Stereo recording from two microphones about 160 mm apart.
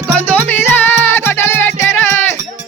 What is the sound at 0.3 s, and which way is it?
Music, 10° left (ahead or behind).